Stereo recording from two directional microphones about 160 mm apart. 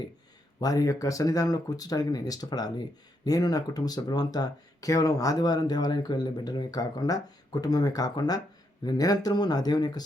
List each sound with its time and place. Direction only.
0.6 s speech: 25° left (ahead or behind)